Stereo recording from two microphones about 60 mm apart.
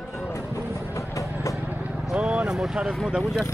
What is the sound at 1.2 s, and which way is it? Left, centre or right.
Vehicle, left.